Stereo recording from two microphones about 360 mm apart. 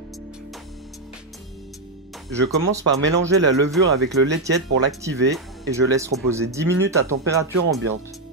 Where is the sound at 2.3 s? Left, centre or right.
Centre.